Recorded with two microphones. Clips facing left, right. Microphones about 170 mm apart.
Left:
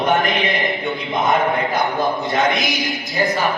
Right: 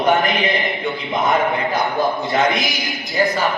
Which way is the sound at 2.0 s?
Centre (ahead or behind).